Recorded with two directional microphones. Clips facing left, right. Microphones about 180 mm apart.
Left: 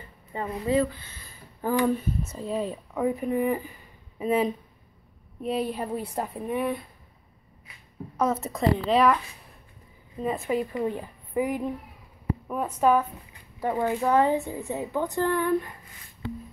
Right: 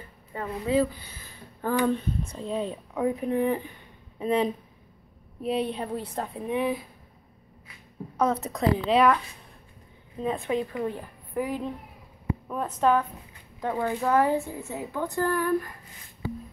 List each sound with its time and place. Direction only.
0.7 s speech: 10° right (ahead or behind)
1.6 s speech: 10° left (ahead or behind)
8.2 s speech: centre (ahead or behind)
10.2 s speech: 5° left (ahead or behind)
10.7 s a woman's voice: 15° left (ahead or behind)